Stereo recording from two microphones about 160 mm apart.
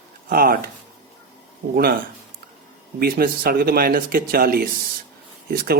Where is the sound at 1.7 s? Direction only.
75° right (ahead or behind).